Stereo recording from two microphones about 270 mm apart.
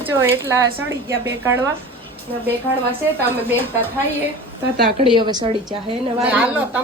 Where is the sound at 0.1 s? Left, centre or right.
Centre.